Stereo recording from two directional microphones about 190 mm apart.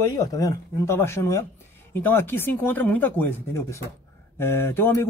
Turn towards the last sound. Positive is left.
turn(degrees=10)  # may be behind; listen again after turning